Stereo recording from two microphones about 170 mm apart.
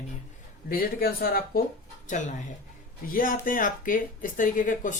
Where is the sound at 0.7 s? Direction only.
60° left (ahead or behind).